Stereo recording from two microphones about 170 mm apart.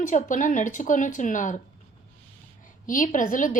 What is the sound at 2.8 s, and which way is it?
Speech, 50° left (ahead or behind).